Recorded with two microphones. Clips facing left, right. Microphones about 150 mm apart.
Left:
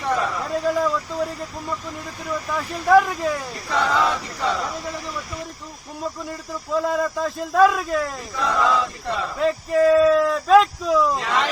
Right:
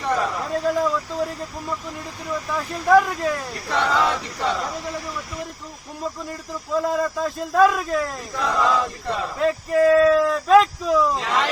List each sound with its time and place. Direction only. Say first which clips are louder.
0.0 s a sound: even; centre (ahead or behind)
2.5 s a man's voice: even; centre (ahead or behind)
6.7 s a man's voice: even; centre (ahead or behind)